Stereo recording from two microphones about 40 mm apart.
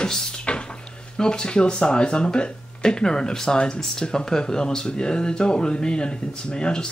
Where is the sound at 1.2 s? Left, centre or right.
Left.